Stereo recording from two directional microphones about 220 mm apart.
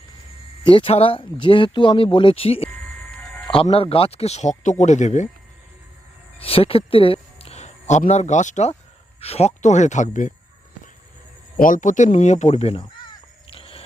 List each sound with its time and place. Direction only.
0.7 s speech: 25° left (ahead or behind)
6.4 s speech: 25° left (ahead or behind)
11.5 s crow: 40° left (ahead or behind)